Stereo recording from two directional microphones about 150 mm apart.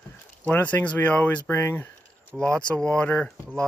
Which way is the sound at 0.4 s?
10° left (ahead or behind).